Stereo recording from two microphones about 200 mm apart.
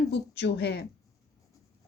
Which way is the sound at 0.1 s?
55° left (ahead or behind).